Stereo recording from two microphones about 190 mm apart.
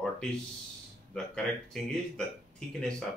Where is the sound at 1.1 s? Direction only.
5° left (ahead or behind).